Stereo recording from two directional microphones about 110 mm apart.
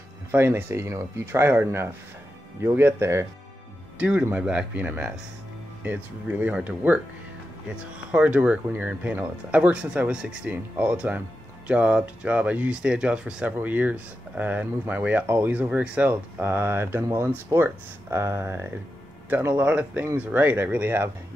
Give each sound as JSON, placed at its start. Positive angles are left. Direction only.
{"t": 0.3, "sound": "speech", "side_deg": -20}
{"t": 4.0, "sound": "speech", "side_deg": -10}